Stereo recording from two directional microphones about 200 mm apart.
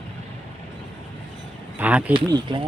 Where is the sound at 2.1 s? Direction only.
25° right (ahead or behind).